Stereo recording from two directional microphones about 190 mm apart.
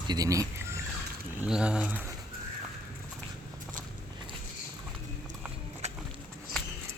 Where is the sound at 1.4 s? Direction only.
5° right (ahead or behind).